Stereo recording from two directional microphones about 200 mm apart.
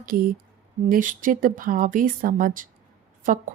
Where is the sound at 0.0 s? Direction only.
45° right (ahead or behind).